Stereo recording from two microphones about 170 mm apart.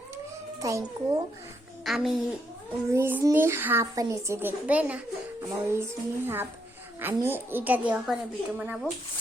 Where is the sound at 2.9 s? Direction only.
15° right (ahead or behind).